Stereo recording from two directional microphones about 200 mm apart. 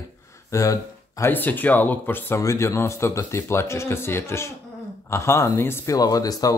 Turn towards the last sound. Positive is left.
turn(degrees=20)  # may be behind; listen again after turning